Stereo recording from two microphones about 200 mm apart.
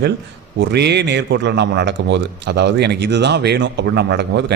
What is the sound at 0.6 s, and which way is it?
Speech, 55° right (ahead or behind).